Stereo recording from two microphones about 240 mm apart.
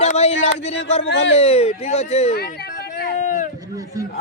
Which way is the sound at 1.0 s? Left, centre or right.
Left.